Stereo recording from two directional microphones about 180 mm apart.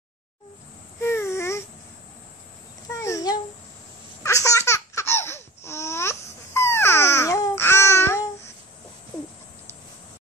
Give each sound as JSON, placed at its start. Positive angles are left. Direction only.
{"t": 1.0, "sound": "babbling", "side_deg": 15}
{"t": 2.9, "sound": "babbling", "side_deg": 15}
{"t": 4.2, "sound": "laughter", "side_deg": 15}
{"t": 6.5, "sound": "babbling", "side_deg": 15}